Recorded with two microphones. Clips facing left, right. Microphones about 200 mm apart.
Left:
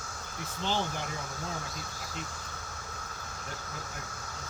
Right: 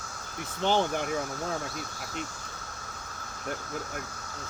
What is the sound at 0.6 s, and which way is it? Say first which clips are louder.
Speech: right 7 dB; 60° right (ahead or behind).